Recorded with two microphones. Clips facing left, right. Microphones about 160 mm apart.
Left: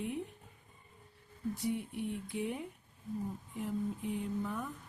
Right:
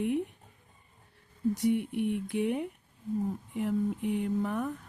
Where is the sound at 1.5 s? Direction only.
70° right (ahead or behind).